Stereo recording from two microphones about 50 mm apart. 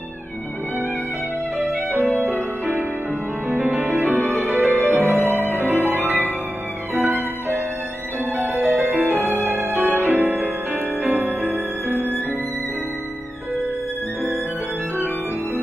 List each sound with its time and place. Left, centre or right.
1.6 s music: right
8.5 s music: right